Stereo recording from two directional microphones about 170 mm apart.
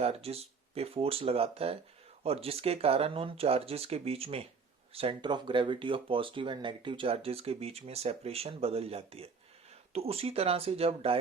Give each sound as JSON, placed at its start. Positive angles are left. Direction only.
{"t": 0.0, "sound": "speech", "side_deg": -35}